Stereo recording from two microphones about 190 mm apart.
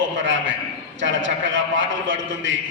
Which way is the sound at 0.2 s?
75° right (ahead or behind).